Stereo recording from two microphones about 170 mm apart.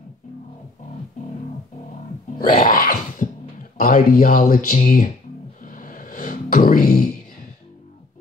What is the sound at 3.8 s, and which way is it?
Speech, 55° left (ahead or behind).